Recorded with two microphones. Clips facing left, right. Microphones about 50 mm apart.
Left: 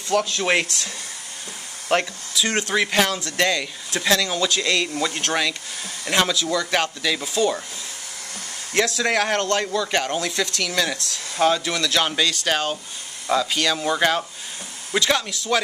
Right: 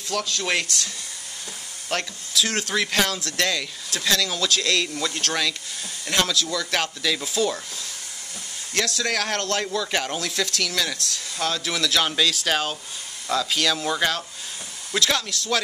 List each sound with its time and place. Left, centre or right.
0.1 s speech: centre
1.9 s speech: left
2.3 s speech: centre
8.7 s speech: centre
9.4 s speech: centre; by 11.6 s left
11.6 s speech: centre